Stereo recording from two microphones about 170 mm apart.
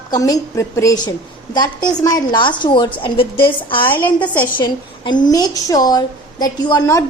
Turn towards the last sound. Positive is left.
turn(degrees=20)  # may be behind; listen again after turning